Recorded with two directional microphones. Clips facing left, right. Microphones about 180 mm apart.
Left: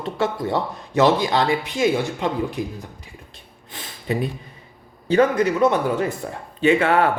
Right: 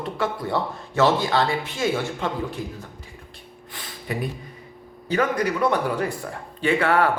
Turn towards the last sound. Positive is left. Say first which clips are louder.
# left 3 dB
turn(degrees=20)  # may be behind; listen again after turning